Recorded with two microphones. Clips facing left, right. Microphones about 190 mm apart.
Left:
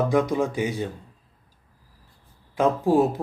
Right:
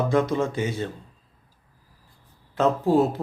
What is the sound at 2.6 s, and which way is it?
Speech, 15° left (ahead or behind).